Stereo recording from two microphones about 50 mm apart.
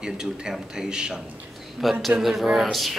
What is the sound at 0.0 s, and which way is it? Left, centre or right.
Speech, centre.